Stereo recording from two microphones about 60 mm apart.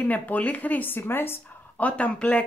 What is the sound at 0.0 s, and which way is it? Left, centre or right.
Speech, left.